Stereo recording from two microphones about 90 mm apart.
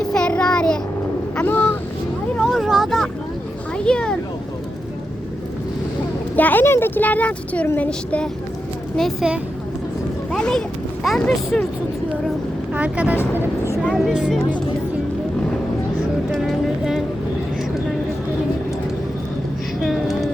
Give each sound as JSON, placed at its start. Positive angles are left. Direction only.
{"t": 0.1, "sound": "child singing", "side_deg": 10}
{"t": 1.4, "sound": "a sound", "side_deg": 20}
{"t": 2.3, "sound": "vehicle", "side_deg": 5}
{"t": 3.8, "sound": "a sound", "side_deg": 10}
{"t": 6.3, "sound": "speech", "side_deg": 20}
{"t": 9.2, "sound": "speech", "side_deg": -10}
{"t": 10.3, "sound": "speech", "side_deg": 5}
{"t": 12.7, "sound": "speech", "side_deg": -15}
{"t": 13.9, "sound": "speech", "side_deg": -5}
{"t": 16.4, "sound": "a sound", "side_deg": -5}
{"t": 19.8, "sound": "music", "side_deg": 0}